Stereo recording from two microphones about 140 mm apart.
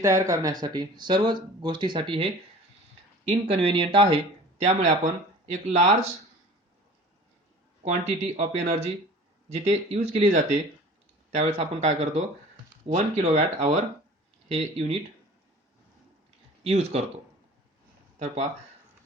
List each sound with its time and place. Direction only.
0.0 s speech: 20° right (ahead or behind); by 4.2 s 35° right (ahead or behind)
4.6 s speech: 60° right (ahead or behind)
7.8 s speech: 50° right (ahead or behind)
16.6 s speech: 45° right (ahead or behind)